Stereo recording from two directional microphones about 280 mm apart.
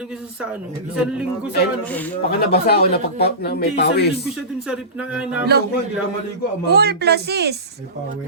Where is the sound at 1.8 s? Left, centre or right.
Centre.